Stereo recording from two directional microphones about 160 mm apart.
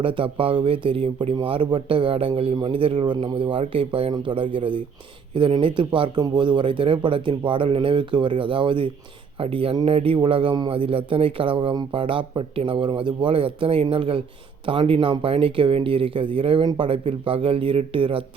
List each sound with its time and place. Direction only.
0.0 s speech: 35° right (ahead or behind)